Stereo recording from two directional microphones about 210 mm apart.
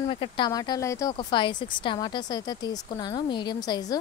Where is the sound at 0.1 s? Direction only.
25° left (ahead or behind).